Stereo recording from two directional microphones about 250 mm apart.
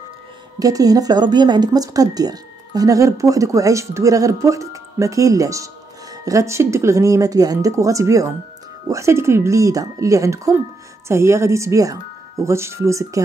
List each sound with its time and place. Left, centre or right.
0.6 s a woman's voice: centre